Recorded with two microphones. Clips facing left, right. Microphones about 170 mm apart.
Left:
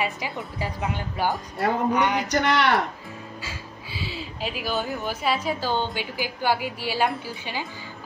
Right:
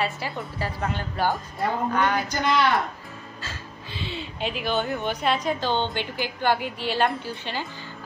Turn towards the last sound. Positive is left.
turn(degrees=10)  # may be behind; listen again after turning